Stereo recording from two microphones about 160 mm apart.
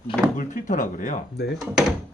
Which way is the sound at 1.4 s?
90° left.